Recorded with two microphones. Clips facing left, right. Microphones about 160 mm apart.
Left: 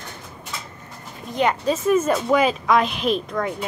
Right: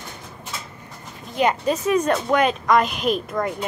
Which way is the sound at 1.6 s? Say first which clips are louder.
Left 1 dB; centre (ahead or behind).